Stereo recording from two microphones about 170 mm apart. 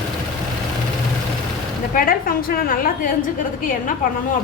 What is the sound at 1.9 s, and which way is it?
A woman's voice, 55° left (ahead or behind).